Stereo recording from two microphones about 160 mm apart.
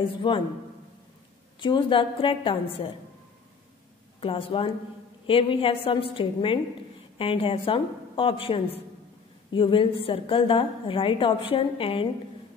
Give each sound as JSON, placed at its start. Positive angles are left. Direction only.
{"t": 0.2, "sound": "a woman's voice", "side_deg": 30}
{"t": 1.6, "sound": "a woman's voice", "side_deg": 30}
{"t": 4.2, "sound": "a woman's voice", "side_deg": 35}